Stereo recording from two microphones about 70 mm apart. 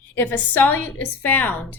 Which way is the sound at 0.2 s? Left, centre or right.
Left.